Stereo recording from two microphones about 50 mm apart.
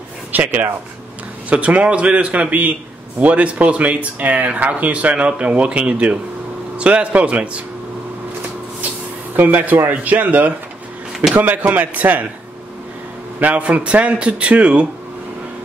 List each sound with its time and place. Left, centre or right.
0.3 s speech: right
1.5 s speech: right
9.3 s speech: right
13.4 s speech: right